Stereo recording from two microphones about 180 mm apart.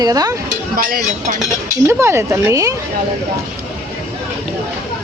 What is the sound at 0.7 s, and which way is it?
Speech, 55° right (ahead or behind).